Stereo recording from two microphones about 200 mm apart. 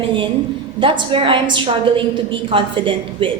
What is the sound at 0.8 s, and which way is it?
A woman's voice, 25° right (ahead or behind).